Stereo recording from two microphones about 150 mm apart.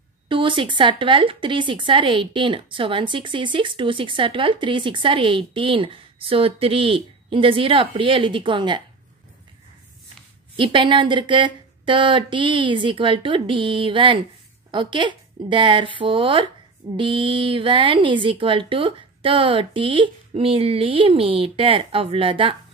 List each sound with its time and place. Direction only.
0.3 s a woman's voice: 35° right (ahead or behind)
10.5 s a woman's voice: 35° right (ahead or behind)